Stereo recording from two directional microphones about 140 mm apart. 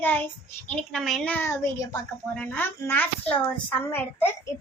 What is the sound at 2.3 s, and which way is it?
A woman's voice, 10° left (ahead or behind).